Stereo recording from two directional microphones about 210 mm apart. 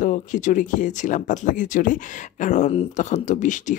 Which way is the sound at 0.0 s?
35° left (ahead or behind).